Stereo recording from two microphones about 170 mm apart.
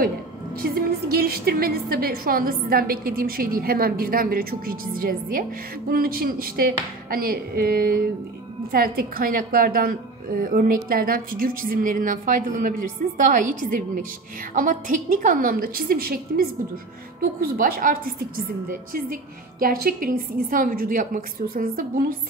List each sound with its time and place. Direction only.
0.6 s a woman's voice: 60° right (ahead or behind)